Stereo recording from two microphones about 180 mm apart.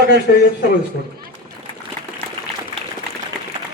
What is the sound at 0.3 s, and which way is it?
Speech, 60° left (ahead or behind).